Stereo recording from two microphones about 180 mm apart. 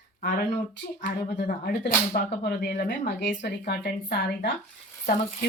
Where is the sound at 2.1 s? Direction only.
55° left (ahead or behind).